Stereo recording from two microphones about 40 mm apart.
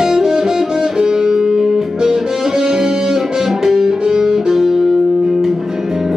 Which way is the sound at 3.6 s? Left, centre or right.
Centre.